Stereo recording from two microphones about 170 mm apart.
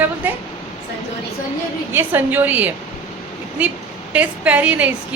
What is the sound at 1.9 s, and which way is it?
Speech, 10° right (ahead or behind).